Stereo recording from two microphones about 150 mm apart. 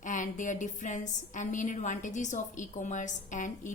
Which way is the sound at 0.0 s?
60° left (ahead or behind).